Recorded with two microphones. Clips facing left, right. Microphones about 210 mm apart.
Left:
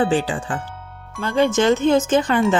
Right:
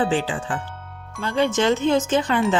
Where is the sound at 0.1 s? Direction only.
40° left (ahead or behind).